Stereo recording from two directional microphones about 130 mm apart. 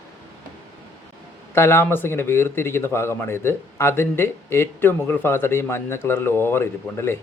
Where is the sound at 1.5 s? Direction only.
20° left (ahead or behind).